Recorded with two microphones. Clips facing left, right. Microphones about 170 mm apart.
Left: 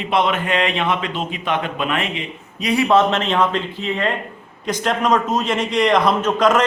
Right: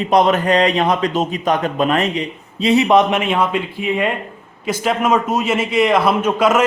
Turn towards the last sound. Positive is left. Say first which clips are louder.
# right 1 dB
turn(degrees=-10)  # may be behind; listen again after turning